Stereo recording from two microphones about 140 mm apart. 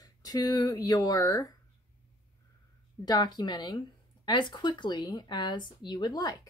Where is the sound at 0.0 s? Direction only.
30° left (ahead or behind).